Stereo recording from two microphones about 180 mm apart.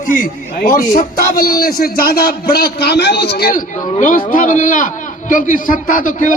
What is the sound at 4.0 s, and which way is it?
A man's voice, 50° left (ahead or behind).